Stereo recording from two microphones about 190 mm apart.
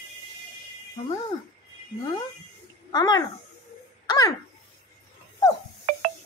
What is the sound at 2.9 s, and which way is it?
Speech, 20° left (ahead or behind).